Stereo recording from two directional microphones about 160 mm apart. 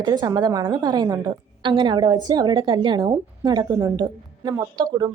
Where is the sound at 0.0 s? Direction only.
25° right (ahead or behind).